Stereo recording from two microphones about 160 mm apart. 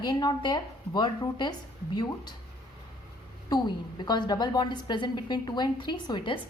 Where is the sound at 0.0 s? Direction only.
25° left (ahead or behind).